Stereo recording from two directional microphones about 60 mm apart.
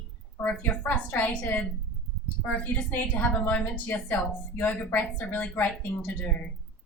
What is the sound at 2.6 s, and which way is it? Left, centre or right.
A woman's voice, left.